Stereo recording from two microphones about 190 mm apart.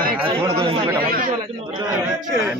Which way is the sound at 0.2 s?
25° right (ahead or behind).